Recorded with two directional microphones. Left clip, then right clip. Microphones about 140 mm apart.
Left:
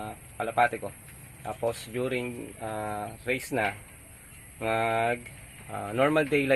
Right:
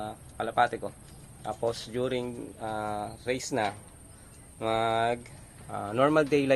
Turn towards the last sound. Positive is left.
turn(degrees=-15)  # may be behind; listen again after turning